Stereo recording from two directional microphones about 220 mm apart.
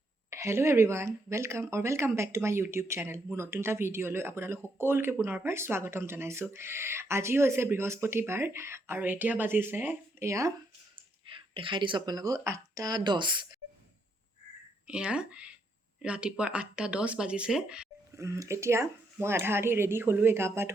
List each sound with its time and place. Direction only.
0.3 s speech: 10° right (ahead or behind)
14.8 s speech: 5° right (ahead or behind)